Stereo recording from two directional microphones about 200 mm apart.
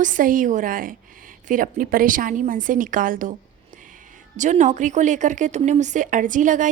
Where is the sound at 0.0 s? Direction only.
40° right (ahead or behind).